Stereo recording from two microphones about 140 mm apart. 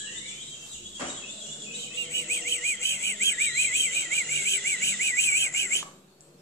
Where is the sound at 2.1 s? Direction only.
20° left (ahead or behind).